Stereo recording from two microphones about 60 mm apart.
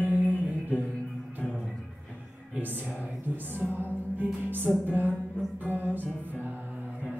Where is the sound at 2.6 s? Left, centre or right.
Right.